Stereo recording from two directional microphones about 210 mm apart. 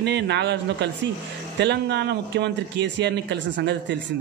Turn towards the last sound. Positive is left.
turn(degrees=-55)  # may be behind; listen again after turning